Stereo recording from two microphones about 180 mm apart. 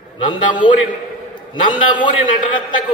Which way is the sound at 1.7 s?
25° left (ahead or behind).